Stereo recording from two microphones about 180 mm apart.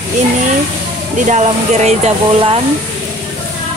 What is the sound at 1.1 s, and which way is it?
Speech, 40° right (ahead or behind).